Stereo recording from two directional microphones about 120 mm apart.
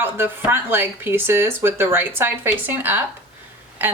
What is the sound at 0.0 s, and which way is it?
A woman's voice, 20° right (ahead or behind).